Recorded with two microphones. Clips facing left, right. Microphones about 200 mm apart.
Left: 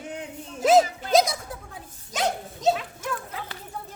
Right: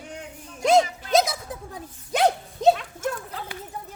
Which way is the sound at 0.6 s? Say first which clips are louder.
Left 1 dB; 5° left (ahead or behind).